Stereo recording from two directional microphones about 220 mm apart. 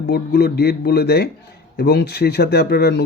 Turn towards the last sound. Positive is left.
turn(degrees=45)  # may be behind; listen again after turning